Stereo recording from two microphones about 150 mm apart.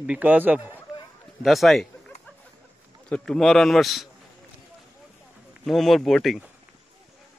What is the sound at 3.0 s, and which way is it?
Speech, 5° left (ahead or behind).